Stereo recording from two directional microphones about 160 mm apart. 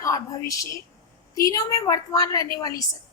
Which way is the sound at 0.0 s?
20° left (ahead or behind).